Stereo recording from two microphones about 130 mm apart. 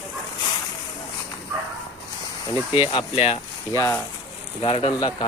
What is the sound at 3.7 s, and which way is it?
Speech, 25° left (ahead or behind).